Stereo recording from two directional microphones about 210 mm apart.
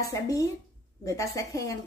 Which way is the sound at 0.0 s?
15° left (ahead or behind).